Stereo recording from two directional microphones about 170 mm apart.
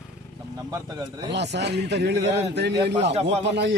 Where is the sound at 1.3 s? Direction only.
90° right.